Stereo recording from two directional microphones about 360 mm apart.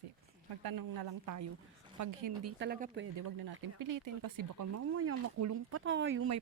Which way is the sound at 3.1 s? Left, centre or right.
Right.